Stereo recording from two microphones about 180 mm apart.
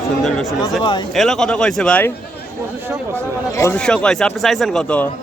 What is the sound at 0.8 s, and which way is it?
Speech, 25° left (ahead or behind).